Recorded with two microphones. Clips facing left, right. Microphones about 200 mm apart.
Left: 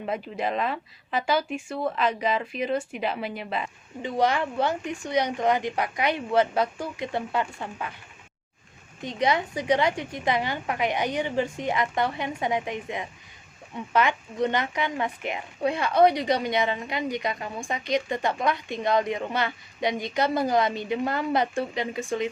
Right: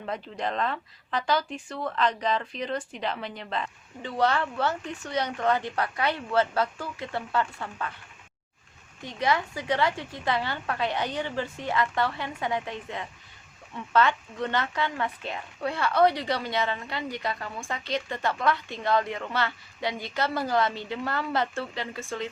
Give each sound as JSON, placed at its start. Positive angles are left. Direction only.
{"t": 0.0, "sound": "speech", "side_deg": 10}
{"t": 9.0, "sound": "speech", "side_deg": 20}